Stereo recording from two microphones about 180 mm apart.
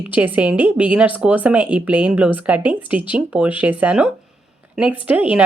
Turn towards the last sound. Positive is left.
turn(degrees=-5)  # may be behind; listen again after turning